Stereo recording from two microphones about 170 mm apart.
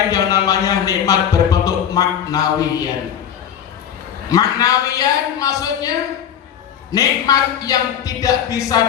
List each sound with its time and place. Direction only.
0.1 s speech: 20° left (ahead or behind)
4.3 s speech: 20° left (ahead or behind)
6.9 s speech: 20° left (ahead or behind)